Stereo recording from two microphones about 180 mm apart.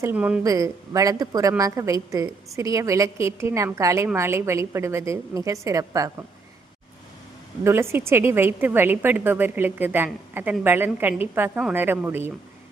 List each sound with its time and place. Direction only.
0.0 s a woman's voice: 10° right (ahead or behind)
0.4 s a woman's voice: 20° right (ahead or behind)
7.6 s a woman's voice: 15° right (ahead or behind)